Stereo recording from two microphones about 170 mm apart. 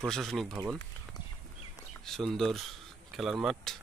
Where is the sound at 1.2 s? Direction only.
25° left (ahead or behind).